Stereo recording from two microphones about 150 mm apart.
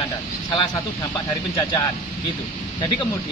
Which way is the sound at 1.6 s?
30° left (ahead or behind).